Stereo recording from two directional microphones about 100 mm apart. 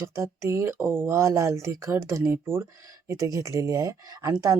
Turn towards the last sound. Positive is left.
turn(degrees=-35)  # may be behind; listen again after turning